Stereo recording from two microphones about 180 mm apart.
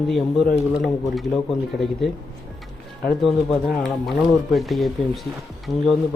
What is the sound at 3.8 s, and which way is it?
Speech, centre (ahead or behind).